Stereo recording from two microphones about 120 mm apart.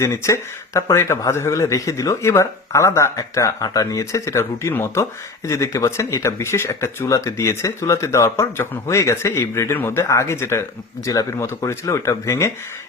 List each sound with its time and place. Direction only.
0.0 s speech: 25° left (ahead or behind)